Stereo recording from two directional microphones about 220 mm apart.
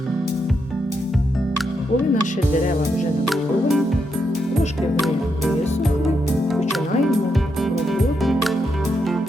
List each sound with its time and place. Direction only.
3.2 s music: centre (ahead or behind)
4.9 s music: centre (ahead or behind)
7.6 s music: centre (ahead or behind)